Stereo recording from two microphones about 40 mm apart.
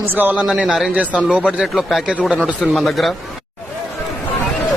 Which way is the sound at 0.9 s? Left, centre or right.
Right.